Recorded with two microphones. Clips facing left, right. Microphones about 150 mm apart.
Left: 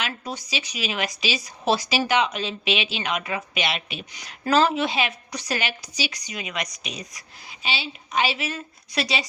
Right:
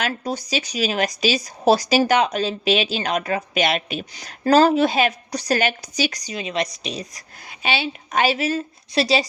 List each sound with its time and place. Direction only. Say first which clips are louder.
0.0 s speech: right 6 dB; 40° right (ahead or behind)
7.6 s speech: right 7 dB; 55° right (ahead or behind); by 9.2 s 35° right (ahead or behind)